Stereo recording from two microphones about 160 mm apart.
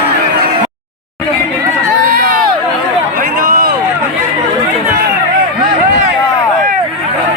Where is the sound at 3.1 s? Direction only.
60° right (ahead or behind).